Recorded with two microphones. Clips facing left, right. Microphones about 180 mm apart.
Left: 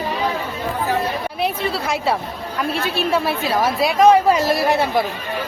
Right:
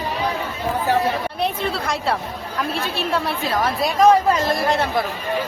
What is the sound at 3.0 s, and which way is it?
A woman's voice, centre (ahead or behind).